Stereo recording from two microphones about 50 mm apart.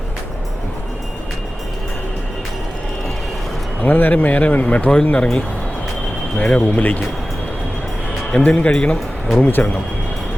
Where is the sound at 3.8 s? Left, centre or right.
Left.